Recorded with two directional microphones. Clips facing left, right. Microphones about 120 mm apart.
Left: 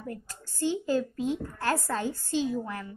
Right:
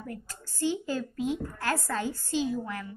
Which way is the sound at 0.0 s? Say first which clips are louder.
Left 1 dB; 20° left (ahead or behind).